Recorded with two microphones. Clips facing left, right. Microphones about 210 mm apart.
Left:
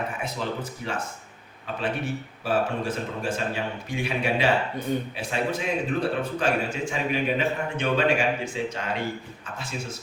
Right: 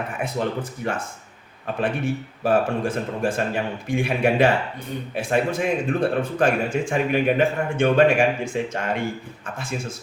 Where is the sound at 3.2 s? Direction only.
50° right (ahead or behind).